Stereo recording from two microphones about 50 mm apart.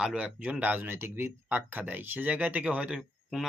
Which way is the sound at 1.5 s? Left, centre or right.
Right.